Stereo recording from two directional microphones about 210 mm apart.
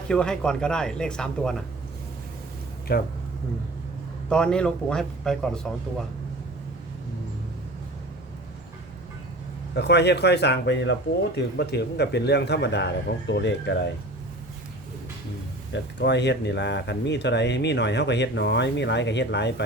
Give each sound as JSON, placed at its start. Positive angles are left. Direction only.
{"t": 0.1, "sound": "speech", "side_deg": 5}
{"t": 2.9, "sound": "speech", "side_deg": 50}
{"t": 4.3, "sound": "speech", "side_deg": 5}
{"t": 9.7, "sound": "speech", "side_deg": 50}
{"t": 15.7, "sound": "speech", "side_deg": 55}